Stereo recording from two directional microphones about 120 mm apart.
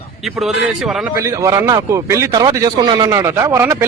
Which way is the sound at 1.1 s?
25° right (ahead or behind).